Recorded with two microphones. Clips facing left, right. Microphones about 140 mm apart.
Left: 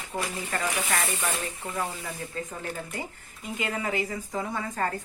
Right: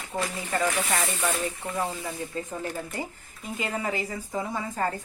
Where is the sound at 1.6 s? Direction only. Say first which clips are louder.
Right 2 dB; 25° right (ahead or behind).